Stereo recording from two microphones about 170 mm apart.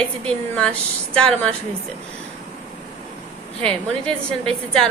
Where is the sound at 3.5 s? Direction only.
35° right (ahead or behind).